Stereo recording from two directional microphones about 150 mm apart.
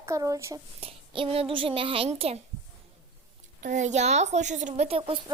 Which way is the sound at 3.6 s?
55° right (ahead or behind).